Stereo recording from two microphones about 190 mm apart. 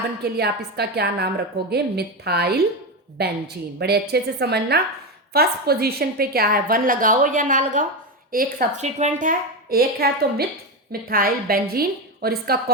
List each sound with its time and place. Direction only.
0.2 s a woman's voice: 60° right (ahead or behind)